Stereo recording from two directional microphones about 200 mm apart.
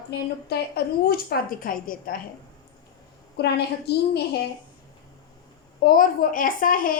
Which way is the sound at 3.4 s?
55° left (ahead or behind).